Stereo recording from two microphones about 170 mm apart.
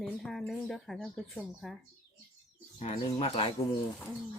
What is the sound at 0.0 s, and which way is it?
Speech, 5° left (ahead or behind).